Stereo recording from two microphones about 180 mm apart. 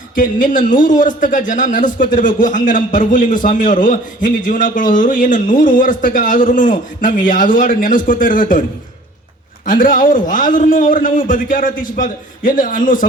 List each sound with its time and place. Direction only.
0.2 s a man's voice: 45° left (ahead or behind)
9.6 s a man's voice: 50° left (ahead or behind)